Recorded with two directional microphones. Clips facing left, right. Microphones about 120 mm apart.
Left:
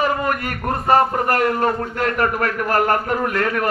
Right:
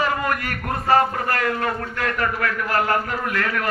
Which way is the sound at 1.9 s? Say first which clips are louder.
Left 4 dB; 40° left (ahead or behind).